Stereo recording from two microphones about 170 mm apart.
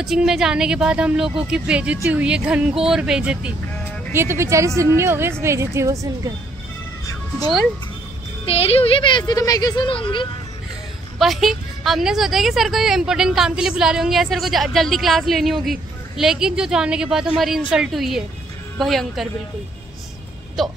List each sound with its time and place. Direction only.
0.0 s a woman's voice: 5° right (ahead or behind); by 6.3 s 20° right (ahead or behind)
7.1 s cat: 20° left (ahead or behind)
8.5 s speech: 35° left (ahead or behind)
11.1 s a woman's voice: centre (ahead or behind)
20.6 s a woman's voice: centre (ahead or behind)